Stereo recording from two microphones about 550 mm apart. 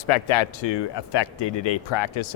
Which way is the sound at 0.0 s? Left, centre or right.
Left.